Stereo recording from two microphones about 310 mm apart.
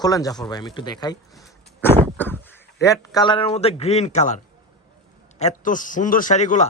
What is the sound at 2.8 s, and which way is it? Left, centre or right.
A man's voice, centre.